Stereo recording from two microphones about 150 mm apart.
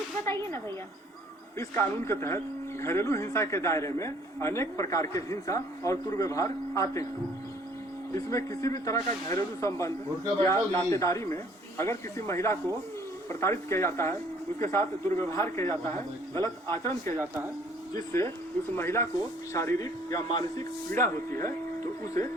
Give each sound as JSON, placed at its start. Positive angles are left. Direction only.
{"t": 0.3, "sound": "a man's voice", "side_deg": 15}
{"t": 8.1, "sound": "a man's voice", "side_deg": 20}
{"t": 17.2, "sound": "speech", "side_deg": -15}
{"t": 17.9, "sound": "a man's voice", "side_deg": 20}